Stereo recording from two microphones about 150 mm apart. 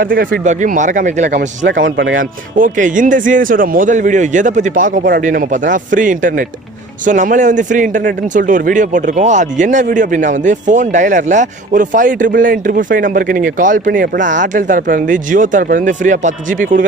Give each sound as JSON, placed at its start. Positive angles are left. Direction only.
{"t": 0.0, "sound": "a man's voice", "side_deg": -70}